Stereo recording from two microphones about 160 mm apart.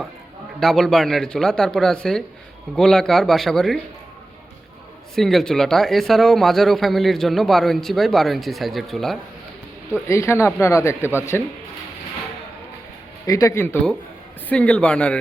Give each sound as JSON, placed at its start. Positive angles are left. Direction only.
{"t": 0.6, "sound": "a man's voice", "side_deg": 0}
{"t": 5.1, "sound": "a man's voice", "side_deg": 0}
{"t": 10.1, "sound": "speech", "side_deg": 15}
{"t": 13.2, "sound": "speech", "side_deg": 20}